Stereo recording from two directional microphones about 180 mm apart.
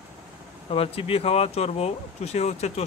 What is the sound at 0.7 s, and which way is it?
Speech, 30° left (ahead or behind).